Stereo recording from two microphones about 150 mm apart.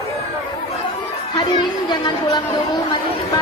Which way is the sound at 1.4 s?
30° left (ahead or behind).